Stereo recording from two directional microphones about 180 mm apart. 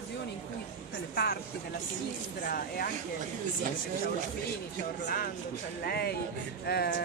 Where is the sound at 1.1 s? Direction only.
60° left (ahead or behind).